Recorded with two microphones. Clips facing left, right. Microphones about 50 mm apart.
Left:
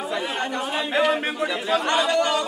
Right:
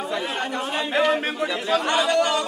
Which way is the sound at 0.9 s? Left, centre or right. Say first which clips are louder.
Even; centre.